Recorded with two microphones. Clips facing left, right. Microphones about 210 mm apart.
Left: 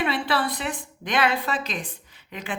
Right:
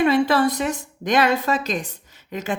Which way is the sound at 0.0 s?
45° right (ahead or behind).